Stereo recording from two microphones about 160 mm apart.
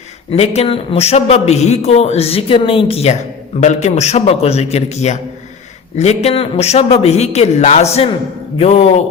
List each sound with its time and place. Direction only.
0.3 s a man's voice: 40° left (ahead or behind)